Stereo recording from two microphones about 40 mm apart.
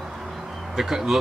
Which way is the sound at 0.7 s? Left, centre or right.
Centre.